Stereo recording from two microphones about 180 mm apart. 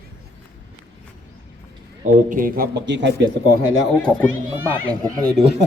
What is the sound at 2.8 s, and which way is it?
Speech, 80° right.